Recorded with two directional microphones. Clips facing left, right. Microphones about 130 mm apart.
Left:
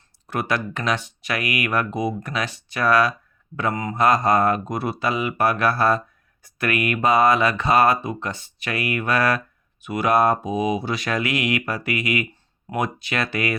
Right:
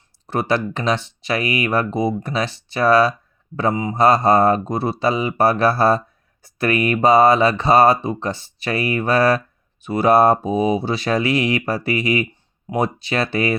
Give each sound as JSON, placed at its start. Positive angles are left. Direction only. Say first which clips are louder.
{"t": 0.3, "sound": "speech", "louder": "right 4 dB", "side_deg": -30}